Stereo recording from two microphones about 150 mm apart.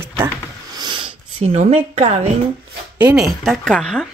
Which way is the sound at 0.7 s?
30° right (ahead or behind).